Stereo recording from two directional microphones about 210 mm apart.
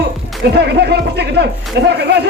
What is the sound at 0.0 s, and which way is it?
A man's voice, 50° right (ahead or behind).